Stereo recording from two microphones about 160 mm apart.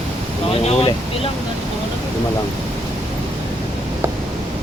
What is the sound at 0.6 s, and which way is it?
Speech, 40° left (ahead or behind).